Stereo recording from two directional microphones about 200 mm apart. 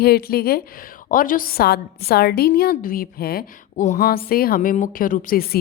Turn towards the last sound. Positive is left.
turn(degrees=45)  # may be behind; listen again after turning